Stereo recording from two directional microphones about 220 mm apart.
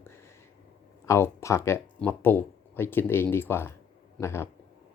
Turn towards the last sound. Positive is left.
turn(degrees=10)  # may be behind; listen again after turning